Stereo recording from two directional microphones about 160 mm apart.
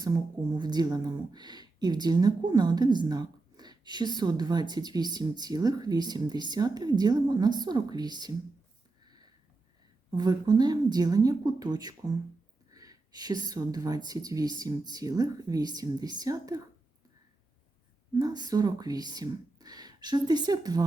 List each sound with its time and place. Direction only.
0.0 s speech: 25° right (ahead or behind)
10.1 s speech: 25° right (ahead or behind)
18.1 s speech: 25° right (ahead or behind)